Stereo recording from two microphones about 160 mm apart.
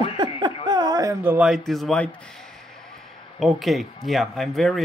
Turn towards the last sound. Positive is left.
turn(degrees=0)  # may be behind; listen again after turning